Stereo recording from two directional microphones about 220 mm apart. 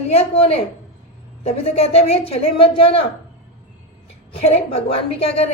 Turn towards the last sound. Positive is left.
turn(degrees=25)  # may be behind; listen again after turning